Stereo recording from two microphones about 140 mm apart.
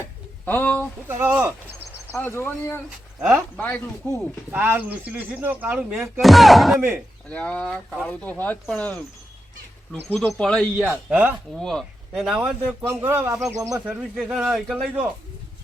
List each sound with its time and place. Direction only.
0.4 s speech: 10° left (ahead or behind)
1.0 s speech: 15° right (ahead or behind)
2.1 s speech: 15° left (ahead or behind)
3.2 s speech: 10° right (ahead or behind)
3.6 s speech: 15° left (ahead or behind)
4.5 s speech: 15° right (ahead or behind)
6.7 s speech: 15° right (ahead or behind)
7.3 s speech: 10° left (ahead or behind)
10.1 s speech: 5° left (ahead or behind)